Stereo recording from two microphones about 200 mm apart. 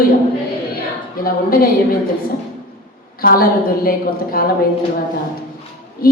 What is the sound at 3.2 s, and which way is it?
A woman's voice, 45° left (ahead or behind).